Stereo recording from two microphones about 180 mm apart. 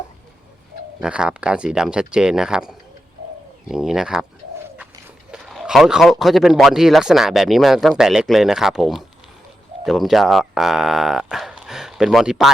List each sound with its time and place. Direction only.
1.0 s speech: 5° right (ahead or behind)
5.3 s speech: centre (ahead or behind)